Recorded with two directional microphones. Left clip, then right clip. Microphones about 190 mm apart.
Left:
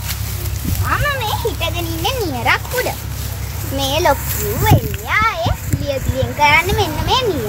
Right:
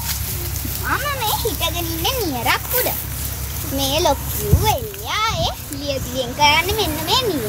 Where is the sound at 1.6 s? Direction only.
Centre (ahead or behind).